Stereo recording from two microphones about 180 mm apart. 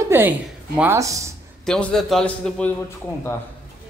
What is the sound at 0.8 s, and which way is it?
Speech, 15° right (ahead or behind).